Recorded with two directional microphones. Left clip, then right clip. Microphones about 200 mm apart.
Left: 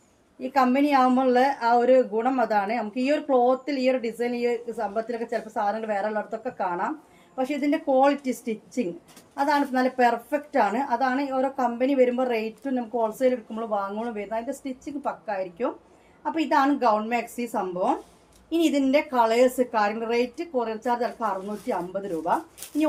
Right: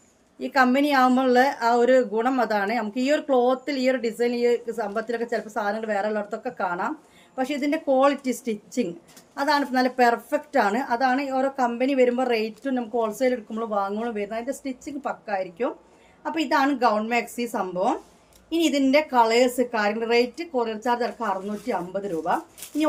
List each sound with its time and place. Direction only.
0.3 s a woman's voice: 30° right (ahead or behind)